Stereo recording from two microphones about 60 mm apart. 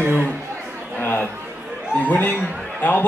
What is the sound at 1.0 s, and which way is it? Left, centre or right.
Speech, left.